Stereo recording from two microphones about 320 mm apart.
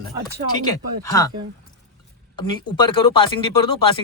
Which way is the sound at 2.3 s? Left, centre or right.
Centre.